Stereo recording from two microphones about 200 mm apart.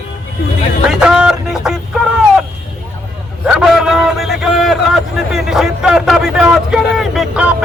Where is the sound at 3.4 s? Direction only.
5° right (ahead or behind).